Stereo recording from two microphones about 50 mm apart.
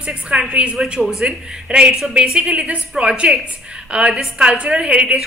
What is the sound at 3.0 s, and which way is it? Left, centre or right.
A woman's voice, right.